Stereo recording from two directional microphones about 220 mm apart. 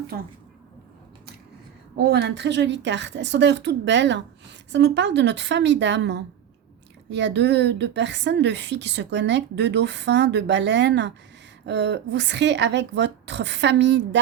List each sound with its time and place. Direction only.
0.1 s a woman's voice: 45° right (ahead or behind)
2.0 s a woman's voice: 50° right (ahead or behind)